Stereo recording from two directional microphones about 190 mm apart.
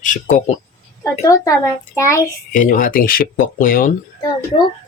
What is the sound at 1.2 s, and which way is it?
A child's voice, 15° left (ahead or behind).